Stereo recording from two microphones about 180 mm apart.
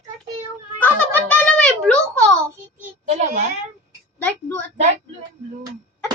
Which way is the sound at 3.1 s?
40° right (ahead or behind).